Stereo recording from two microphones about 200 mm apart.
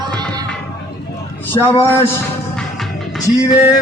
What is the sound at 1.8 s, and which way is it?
Speech, 10° left (ahead or behind).